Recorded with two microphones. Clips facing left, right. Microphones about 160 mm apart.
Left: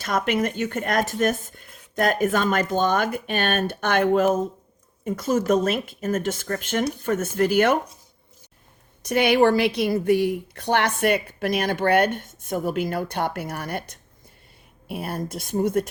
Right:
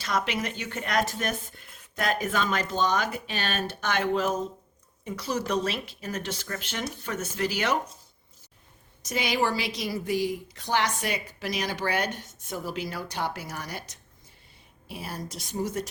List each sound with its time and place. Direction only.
0.0 s speech: 50° left (ahead or behind)
9.0 s a woman's voice: 60° left (ahead or behind)